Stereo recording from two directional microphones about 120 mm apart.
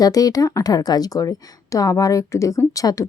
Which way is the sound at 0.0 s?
30° left (ahead or behind).